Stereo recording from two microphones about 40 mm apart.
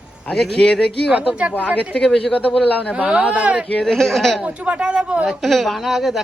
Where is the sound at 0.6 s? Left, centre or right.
Left.